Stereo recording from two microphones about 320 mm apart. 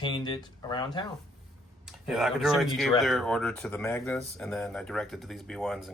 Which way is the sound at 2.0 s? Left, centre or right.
Centre.